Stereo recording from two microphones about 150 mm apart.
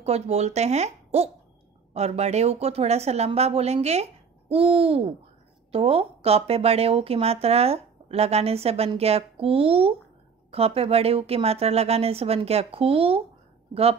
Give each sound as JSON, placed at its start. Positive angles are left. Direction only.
{"t": 0.0, "sound": "speech", "side_deg": -45}